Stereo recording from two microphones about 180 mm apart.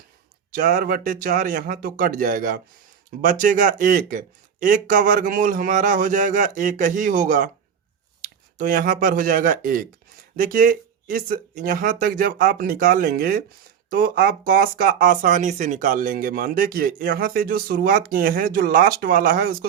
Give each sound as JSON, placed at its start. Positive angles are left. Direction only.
{"t": 0.5, "sound": "speech", "side_deg": -45}